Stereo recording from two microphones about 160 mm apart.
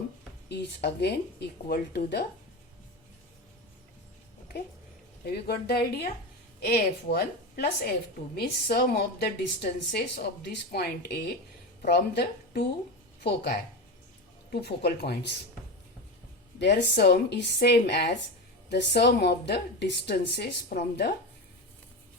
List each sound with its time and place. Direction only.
0.4 s a woman's voice: 90° left
5.2 s a woman's voice: 85° left
16.6 s a woman's voice: 90° left